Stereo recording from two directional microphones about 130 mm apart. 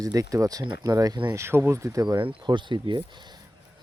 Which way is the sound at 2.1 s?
40° right (ahead or behind).